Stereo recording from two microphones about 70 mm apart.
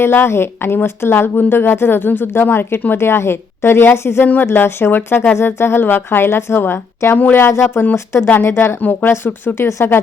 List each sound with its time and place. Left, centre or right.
0.0 s speech: left